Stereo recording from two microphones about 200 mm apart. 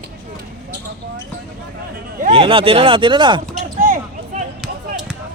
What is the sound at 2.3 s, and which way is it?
Speech, 25° right (ahead or behind).